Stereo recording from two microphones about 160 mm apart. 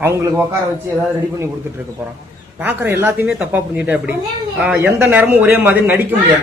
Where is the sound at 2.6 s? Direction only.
10° right (ahead or behind).